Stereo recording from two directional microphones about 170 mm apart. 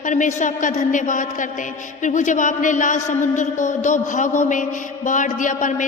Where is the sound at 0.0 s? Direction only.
45° left (ahead or behind).